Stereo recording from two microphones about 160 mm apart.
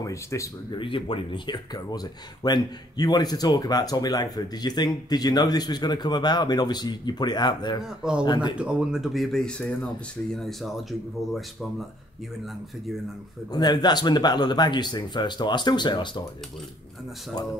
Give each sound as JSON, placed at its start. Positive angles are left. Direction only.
{"t": 0.0, "sound": "speech", "side_deg": 20}
{"t": 0.7, "sound": "speech", "side_deg": 35}
{"t": 7.8, "sound": "speech", "side_deg": -5}
{"t": 13.5, "sound": "speech", "side_deg": 25}